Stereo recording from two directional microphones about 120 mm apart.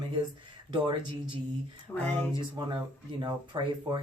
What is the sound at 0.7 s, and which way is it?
Speech, 40° right (ahead or behind).